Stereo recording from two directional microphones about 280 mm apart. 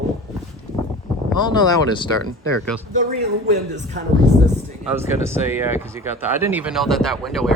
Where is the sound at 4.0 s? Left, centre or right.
Right.